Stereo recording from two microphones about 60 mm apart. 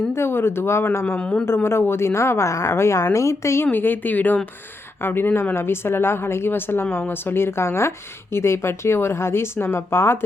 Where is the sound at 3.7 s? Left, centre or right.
Left.